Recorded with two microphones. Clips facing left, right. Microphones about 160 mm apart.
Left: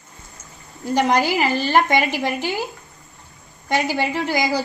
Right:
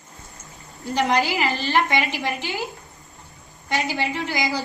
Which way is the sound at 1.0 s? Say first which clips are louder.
Left 3 dB; 45° left (ahead or behind).